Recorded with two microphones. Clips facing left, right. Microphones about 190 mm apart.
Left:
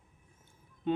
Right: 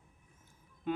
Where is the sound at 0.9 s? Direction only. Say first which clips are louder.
Left 4 dB; 30° left (ahead or behind).